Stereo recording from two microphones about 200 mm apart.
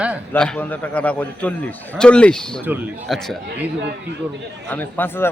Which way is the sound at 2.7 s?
10° right (ahead or behind).